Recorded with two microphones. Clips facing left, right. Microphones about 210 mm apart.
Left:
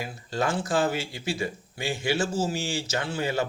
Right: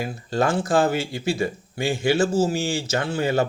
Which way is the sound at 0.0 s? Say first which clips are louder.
Right 6 dB; 50° right (ahead or behind).